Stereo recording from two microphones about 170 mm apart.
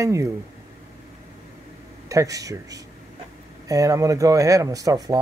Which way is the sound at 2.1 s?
20° right (ahead or behind).